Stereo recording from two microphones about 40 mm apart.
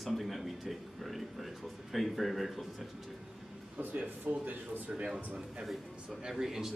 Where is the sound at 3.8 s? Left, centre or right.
Right.